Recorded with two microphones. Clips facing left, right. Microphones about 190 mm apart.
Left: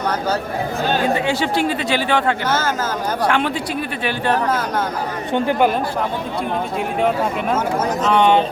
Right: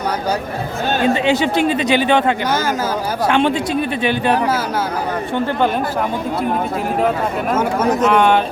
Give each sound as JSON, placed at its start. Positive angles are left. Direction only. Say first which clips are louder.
{"t": 1.0, "sound": "speech", "louder": "right 3 dB", "side_deg": -20}
{"t": 5.3, "sound": "speech", "louder": "left 2 dB", "side_deg": 15}